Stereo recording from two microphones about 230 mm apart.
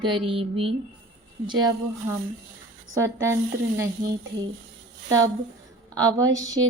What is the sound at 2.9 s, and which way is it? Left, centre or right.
Speech, centre.